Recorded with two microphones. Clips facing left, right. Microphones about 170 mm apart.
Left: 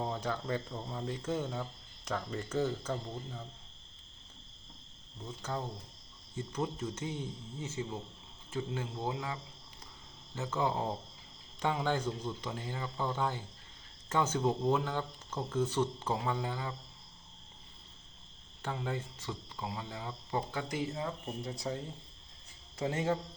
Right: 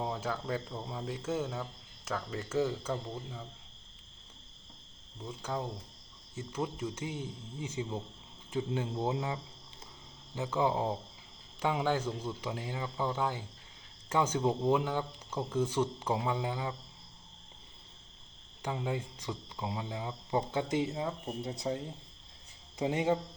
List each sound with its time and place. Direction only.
0.0 s speech: 5° right (ahead or behind)
5.4 s speech: 10° right (ahead or behind)
18.6 s speech: 10° right (ahead or behind)
22.8 s speech: 15° right (ahead or behind)